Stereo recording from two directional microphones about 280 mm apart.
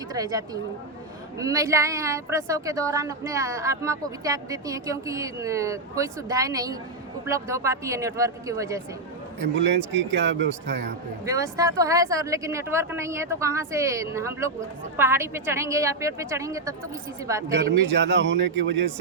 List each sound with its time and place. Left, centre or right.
0.1 s a woman's voice: centre
9.6 s speech: right
11.3 s a woman's voice: centre
17.6 s speech: right